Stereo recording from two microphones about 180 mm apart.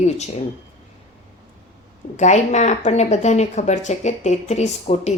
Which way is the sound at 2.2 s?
40° left (ahead or behind).